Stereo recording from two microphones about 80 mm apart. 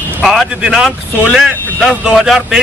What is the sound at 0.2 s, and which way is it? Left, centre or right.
A man's voice, centre.